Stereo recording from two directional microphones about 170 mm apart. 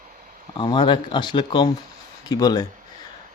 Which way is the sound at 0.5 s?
30° left (ahead or behind).